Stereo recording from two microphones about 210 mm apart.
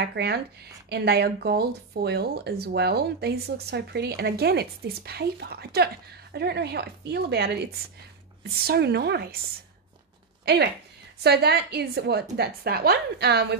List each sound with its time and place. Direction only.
0.0 s speech: 50° right (ahead or behind)
10.4 s speech: 50° right (ahead or behind)